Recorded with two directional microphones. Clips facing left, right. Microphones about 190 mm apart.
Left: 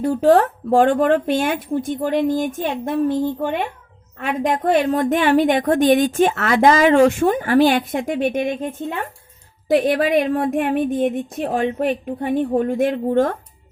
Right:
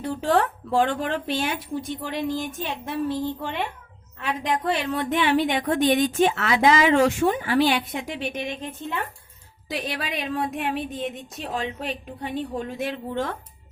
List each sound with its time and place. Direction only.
0.0 s a woman's voice: 40° left (ahead or behind)